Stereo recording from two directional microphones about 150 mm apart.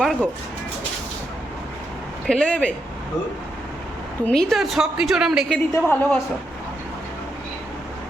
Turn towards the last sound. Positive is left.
turn(degrees=10)  # may be behind; listen again after turning